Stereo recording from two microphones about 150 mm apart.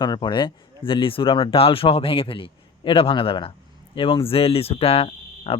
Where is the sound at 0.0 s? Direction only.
30° left (ahead or behind).